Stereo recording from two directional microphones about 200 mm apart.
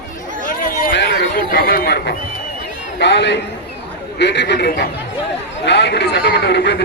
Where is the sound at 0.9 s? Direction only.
60° left (ahead or behind).